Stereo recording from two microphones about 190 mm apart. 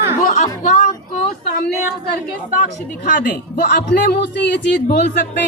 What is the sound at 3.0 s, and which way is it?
A man's voice, 45° left (ahead or behind).